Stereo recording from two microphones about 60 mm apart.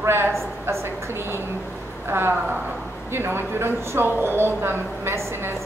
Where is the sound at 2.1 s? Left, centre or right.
Right.